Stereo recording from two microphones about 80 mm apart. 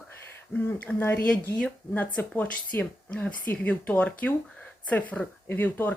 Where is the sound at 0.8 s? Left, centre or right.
Centre.